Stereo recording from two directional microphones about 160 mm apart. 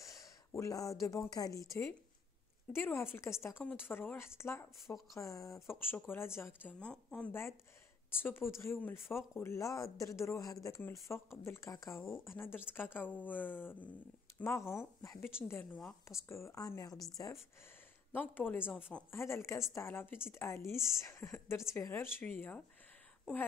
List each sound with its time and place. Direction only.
0.0 s speech: 20° left (ahead or behind)
6.8 s speech: 5° left (ahead or behind); by 17.0 s 20° left (ahead or behind)
18.1 s speech: 10° left (ahead or behind)